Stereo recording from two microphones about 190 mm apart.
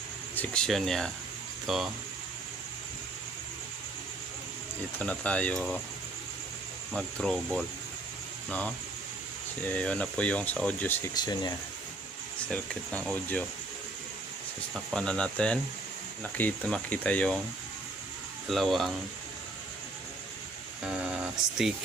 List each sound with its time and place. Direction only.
0.3 s speech: 5° left (ahead or behind)
4.9 s speech: 5° left (ahead or behind)
6.9 s speech: 5° left (ahead or behind)
9.7 s speech: 5° left (ahead or behind)
11.1 s speech: 20° left (ahead or behind)
12.5 s speech: 5° left (ahead or behind)
14.7 s speech: centre (ahead or behind)
18.4 s speech: centre (ahead or behind)
20.8 s speech: 5° right (ahead or behind)